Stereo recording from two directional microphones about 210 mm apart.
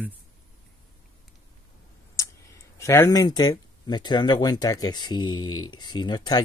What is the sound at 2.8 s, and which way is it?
Speech, 15° left (ahead or behind).